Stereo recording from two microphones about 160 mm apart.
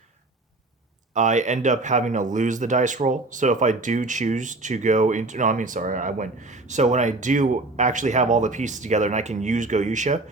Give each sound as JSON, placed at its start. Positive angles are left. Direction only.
{"t": 1.1, "sound": "speech", "side_deg": -50}